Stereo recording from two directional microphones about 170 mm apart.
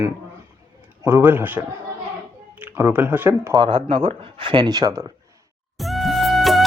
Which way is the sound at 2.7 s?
15° right (ahead or behind).